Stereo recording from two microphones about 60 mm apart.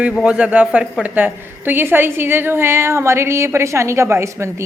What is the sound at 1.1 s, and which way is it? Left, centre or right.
Speech, right.